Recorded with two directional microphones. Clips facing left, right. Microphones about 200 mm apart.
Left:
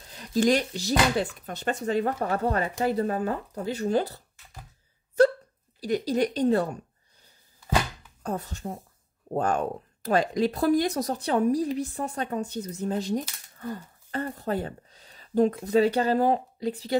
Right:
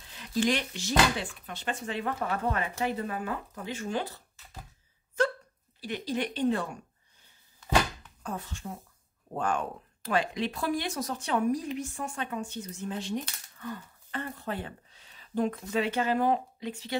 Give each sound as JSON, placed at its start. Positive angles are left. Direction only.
{"t": 0.0, "sound": "speech", "side_deg": 40}
{"t": 5.8, "sound": "speech", "side_deg": 40}
{"t": 8.2, "sound": "speech", "side_deg": 40}